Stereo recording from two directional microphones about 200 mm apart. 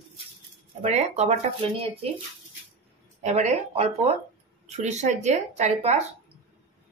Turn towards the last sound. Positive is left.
turn(degrees=-35)  # may be behind; listen again after turning